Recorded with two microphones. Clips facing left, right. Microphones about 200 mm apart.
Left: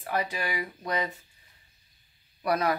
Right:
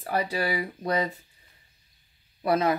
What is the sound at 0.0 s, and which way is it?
Speech, 35° right (ahead or behind).